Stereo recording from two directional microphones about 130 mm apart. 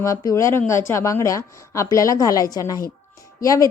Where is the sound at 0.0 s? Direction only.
25° left (ahead or behind).